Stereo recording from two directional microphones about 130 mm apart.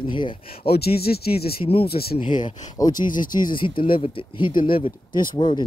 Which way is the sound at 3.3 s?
35° left (ahead or behind).